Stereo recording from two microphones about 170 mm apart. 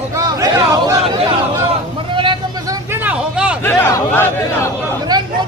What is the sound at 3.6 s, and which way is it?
Speech, 15° left (ahead or behind).